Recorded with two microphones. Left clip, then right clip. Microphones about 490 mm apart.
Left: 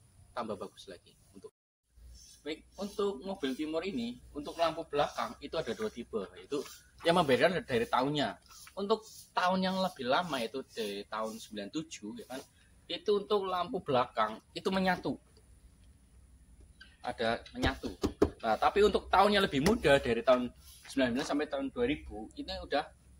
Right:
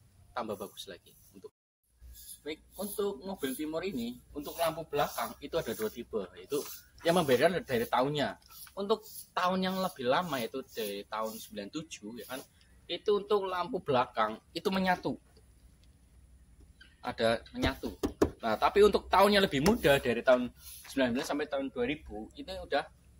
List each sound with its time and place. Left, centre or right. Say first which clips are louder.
0.3 s speech: right 1 dB; right
2.4 s speech: even; right
17.0 s speech: right 3 dB; right